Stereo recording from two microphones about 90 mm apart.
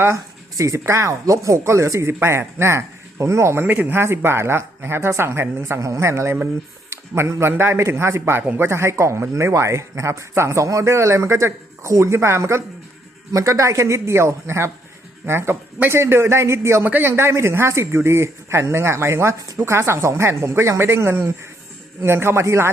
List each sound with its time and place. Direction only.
0.0 s speech: 35° right (ahead or behind)